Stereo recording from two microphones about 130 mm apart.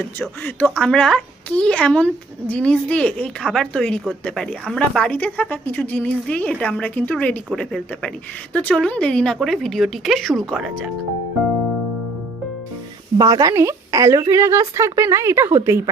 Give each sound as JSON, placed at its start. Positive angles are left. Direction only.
{"t": 0.0, "sound": "a woman's voice", "side_deg": 15}
{"t": 13.1, "sound": "a woman's voice", "side_deg": -30}